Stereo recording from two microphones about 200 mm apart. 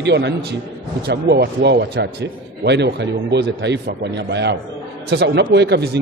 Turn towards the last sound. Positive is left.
turn(degrees=-55)  # may be behind; listen again after turning